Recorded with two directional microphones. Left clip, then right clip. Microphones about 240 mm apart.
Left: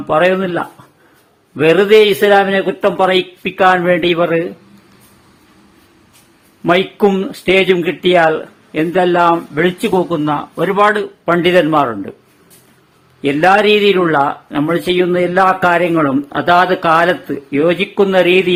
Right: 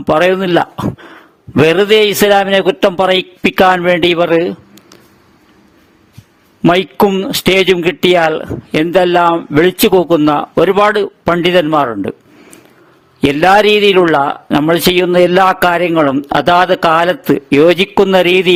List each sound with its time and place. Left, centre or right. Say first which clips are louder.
0.1 s a man's voice: right 3 dB; right
6.6 s a man's voice: right 2 dB; right
13.2 s a man's voice: right 2 dB; right